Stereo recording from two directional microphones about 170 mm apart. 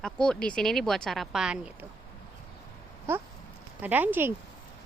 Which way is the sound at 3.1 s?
15° right (ahead or behind).